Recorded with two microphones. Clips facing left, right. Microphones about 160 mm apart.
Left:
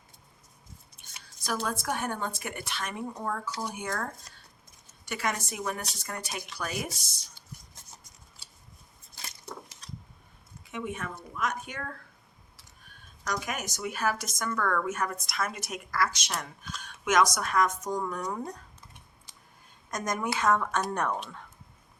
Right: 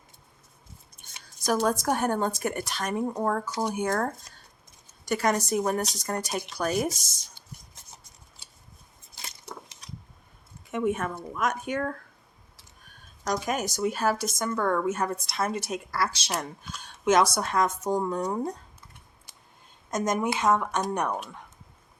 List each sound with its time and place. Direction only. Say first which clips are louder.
1.0 s a sound: right 2 dB; 45° right (ahead or behind)
1.5 s a woman's voice: right 7 dB; 45° right (ahead or behind)
10.7 s speech: right 8 dB; 50° right (ahead or behind)
13.2 s a woman's voice: right 6 dB; 30° right (ahead or behind)
19.9 s a woman's voice: right 5 dB; 25° right (ahead or behind)